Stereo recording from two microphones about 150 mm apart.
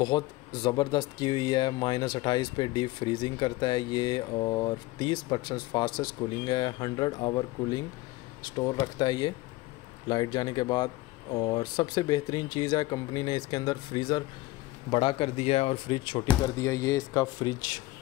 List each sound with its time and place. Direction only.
0.0 s speech: 30° left (ahead or behind)
16.5 s speech: 20° left (ahead or behind)